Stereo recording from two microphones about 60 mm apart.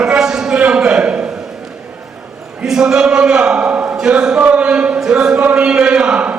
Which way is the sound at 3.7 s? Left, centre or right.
Right.